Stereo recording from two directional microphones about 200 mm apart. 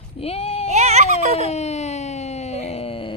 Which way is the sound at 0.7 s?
35° right (ahead or behind).